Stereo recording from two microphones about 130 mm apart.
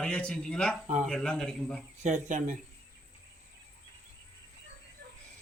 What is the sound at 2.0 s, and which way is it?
Speech, 70° right (ahead or behind).